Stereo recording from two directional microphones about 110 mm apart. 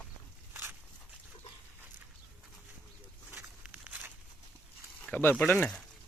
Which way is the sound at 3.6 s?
15° right (ahead or behind).